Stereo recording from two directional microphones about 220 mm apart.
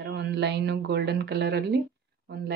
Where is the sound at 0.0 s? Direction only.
50° right (ahead or behind).